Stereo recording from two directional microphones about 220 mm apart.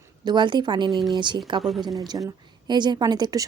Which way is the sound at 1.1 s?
20° right (ahead or behind).